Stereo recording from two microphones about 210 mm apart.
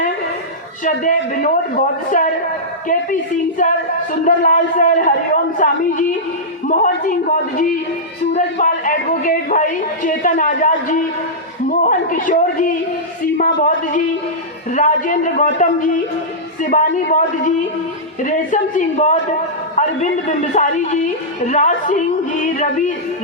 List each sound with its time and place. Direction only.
0.9 s a man's voice: 40° left (ahead or behind)
3.6 s a man's voice: 40° left (ahead or behind)
20.6 s a man's voice: 35° left (ahead or behind)